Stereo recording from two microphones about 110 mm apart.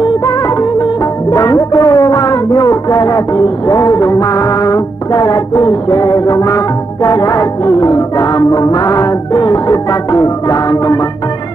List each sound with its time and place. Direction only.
0.0 s music: 35° left (ahead or behind)